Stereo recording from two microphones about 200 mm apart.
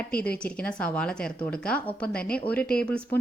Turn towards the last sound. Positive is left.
turn(degrees=5)  # may be behind; listen again after turning